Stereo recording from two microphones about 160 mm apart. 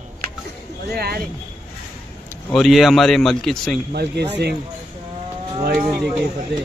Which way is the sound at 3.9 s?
90° right.